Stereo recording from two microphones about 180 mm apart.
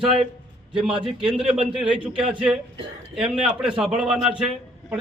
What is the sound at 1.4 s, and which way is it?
A man's voice, 5° right (ahead or behind).